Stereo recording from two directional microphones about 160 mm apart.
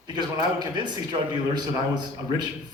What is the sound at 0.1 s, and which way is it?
A man's voice, 25° right (ahead or behind).